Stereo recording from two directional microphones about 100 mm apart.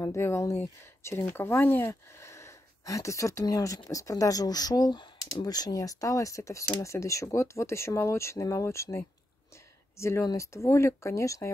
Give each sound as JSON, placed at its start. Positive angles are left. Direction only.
{"t": 0.0, "sound": "speech", "side_deg": 30}